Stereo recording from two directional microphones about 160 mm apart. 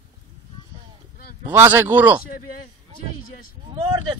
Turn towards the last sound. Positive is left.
turn(degrees=-30)  # may be behind; listen again after turning